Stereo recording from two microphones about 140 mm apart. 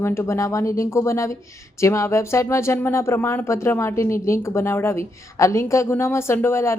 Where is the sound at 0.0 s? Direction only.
20° left (ahead or behind).